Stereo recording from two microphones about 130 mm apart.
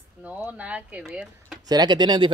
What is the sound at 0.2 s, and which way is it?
Speech, 10° right (ahead or behind).